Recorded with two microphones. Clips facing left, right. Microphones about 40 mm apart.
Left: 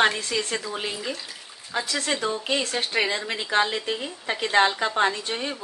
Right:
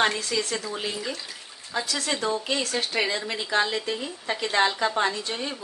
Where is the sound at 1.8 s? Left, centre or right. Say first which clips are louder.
Left 2 dB; left.